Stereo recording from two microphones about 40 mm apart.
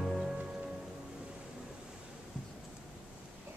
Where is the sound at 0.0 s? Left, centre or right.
Centre.